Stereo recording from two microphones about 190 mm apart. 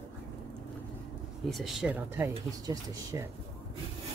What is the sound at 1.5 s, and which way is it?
Speech, centre (ahead or behind).